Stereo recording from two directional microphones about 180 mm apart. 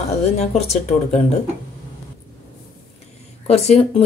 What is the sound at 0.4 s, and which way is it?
Speech, 35° left (ahead or behind).